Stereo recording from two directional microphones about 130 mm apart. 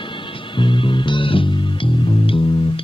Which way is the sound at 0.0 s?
40° left (ahead or behind).